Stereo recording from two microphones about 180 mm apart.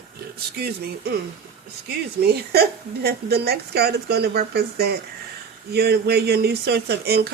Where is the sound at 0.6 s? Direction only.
60° right (ahead or behind).